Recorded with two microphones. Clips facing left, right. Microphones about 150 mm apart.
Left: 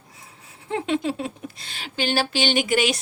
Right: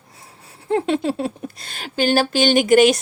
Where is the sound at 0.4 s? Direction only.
40° right (ahead or behind).